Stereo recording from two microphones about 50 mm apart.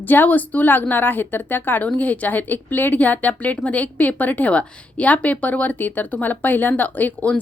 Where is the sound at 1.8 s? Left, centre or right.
Left.